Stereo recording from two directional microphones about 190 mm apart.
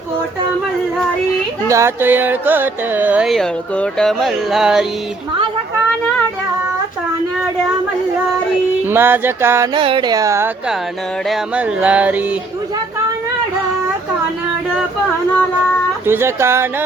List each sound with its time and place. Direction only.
1.6 s carnatic music: 15° right (ahead or behind)
8.8 s carnatic music: 10° right (ahead or behind)
9.7 s speech: 25° right (ahead or behind)
11.3 s carnatic music: 5° right (ahead or behind)
16.0 s carnatic music: 15° right (ahead or behind)